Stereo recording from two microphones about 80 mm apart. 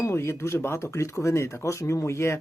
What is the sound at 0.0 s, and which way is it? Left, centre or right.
Speech, left.